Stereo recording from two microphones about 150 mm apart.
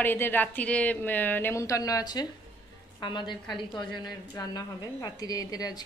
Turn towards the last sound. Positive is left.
turn(degrees=25)  # may be behind; listen again after turning